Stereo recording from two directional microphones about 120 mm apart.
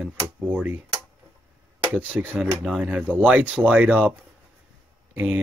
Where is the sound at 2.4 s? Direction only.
5° right (ahead or behind).